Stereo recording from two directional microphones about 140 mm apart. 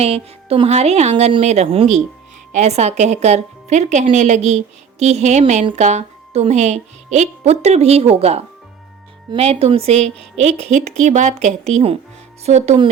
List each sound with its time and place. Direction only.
0.0 s a woman's voice: 45° right (ahead or behind)
10.4 s a woman's voice: 60° right (ahead or behind)